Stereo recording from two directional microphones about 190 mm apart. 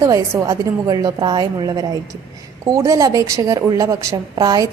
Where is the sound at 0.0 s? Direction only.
15° right (ahead or behind).